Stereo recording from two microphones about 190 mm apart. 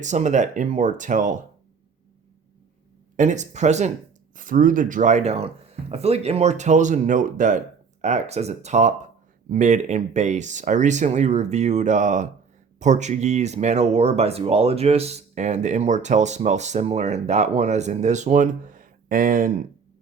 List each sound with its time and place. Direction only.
0.0 s speech: 40° right (ahead or behind)
3.2 s speech: 40° right (ahead or behind)